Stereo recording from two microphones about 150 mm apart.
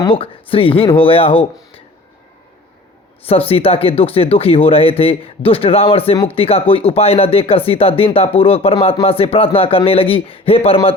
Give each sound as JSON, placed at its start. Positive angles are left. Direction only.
{"t": 0.0, "sound": "speech", "side_deg": 35}
{"t": 3.2, "sound": "speech", "side_deg": 40}